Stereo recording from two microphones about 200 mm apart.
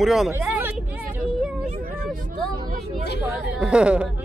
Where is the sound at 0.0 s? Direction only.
Centre (ahead or behind).